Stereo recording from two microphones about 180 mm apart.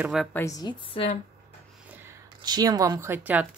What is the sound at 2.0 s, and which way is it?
Speech, 20° right (ahead or behind).